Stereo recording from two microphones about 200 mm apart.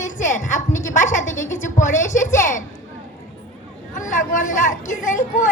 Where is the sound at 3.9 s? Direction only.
40° left (ahead or behind).